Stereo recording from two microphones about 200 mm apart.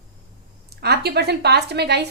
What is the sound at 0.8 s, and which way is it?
A woman's voice, 55° right (ahead or behind).